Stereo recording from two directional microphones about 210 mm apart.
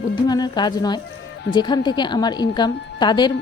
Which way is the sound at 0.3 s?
20° left (ahead or behind).